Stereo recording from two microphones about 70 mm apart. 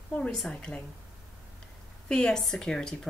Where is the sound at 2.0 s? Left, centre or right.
Centre.